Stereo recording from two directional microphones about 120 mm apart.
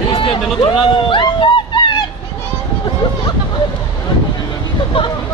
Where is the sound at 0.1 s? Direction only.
45° left (ahead or behind).